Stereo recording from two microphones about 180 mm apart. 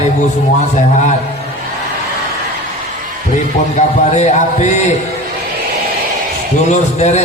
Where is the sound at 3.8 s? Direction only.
40° left (ahead or behind).